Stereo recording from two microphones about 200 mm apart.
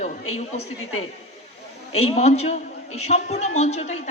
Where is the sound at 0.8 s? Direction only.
90° left.